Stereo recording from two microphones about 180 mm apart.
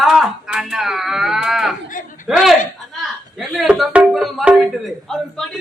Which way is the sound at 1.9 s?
45° left (ahead or behind).